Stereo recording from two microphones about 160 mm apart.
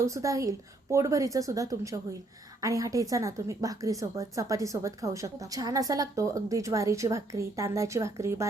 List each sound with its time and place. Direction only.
0.0 s a woman's voice: 20° right (ahead or behind)